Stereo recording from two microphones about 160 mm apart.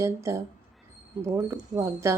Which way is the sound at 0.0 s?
15° right (ahead or behind).